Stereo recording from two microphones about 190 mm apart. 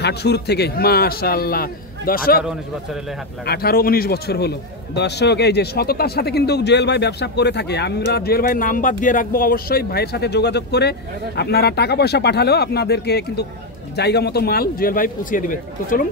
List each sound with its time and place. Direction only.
0.0 s a man's voice: 60° left (ahead or behind)
3.4 s a man's voice: 55° left (ahead or behind)